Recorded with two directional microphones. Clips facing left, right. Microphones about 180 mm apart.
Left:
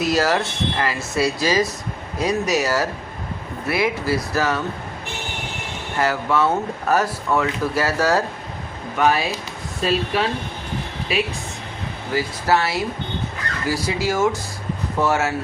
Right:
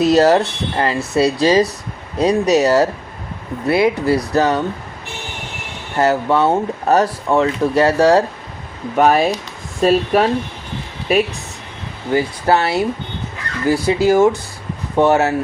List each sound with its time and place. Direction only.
0.0 s speech: 35° right (ahead or behind)
6.1 s speech: 30° right (ahead or behind)
9.0 s speech: 45° right (ahead or behind)
12.1 s speech: 30° right (ahead or behind)